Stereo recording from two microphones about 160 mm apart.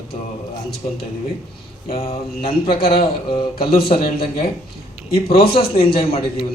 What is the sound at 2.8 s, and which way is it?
A man's voice, 35° left (ahead or behind).